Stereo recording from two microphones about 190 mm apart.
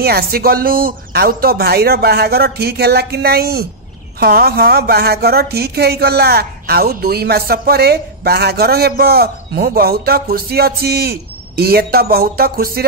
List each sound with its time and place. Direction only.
0.0 s a woman's voice: 55° right (ahead or behind)